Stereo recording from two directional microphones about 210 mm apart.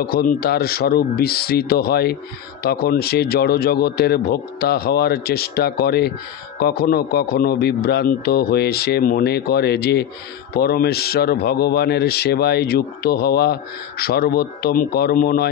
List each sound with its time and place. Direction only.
0.0 s a man's voice: 45° left (ahead or behind)